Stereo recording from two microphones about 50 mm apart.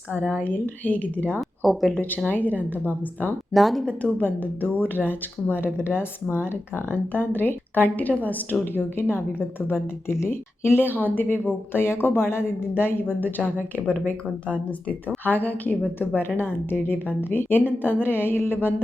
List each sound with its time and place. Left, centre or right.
0.1 s speech: left
1.4 s speech: centre
2.0 s speech: left
3.5 s speech: centre
4.2 s speech: left
8.6 s speech: left
15.2 s speech: left